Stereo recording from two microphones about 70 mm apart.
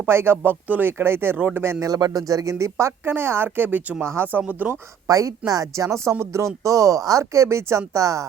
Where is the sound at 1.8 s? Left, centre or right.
Right.